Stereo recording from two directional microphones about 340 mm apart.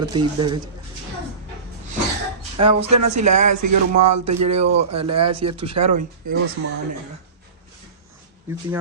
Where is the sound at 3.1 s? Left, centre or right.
Right.